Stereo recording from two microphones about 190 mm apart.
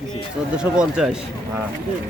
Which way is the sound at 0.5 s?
5° right (ahead or behind).